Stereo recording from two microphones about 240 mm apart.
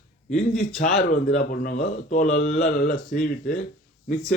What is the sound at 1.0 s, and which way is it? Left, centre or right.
Speech, left.